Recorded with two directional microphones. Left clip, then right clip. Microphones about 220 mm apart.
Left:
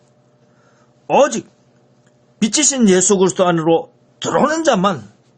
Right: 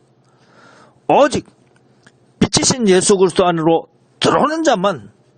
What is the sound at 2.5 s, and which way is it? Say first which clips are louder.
Speech: even; 40° right (ahead or behind).